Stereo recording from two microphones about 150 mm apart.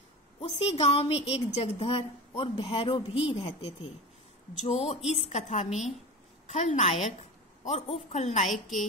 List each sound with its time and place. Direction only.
0.4 s a woman's voice: 45° left (ahead or behind)